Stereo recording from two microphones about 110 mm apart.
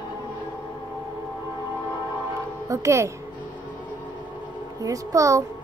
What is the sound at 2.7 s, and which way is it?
Speech, 25° right (ahead or behind).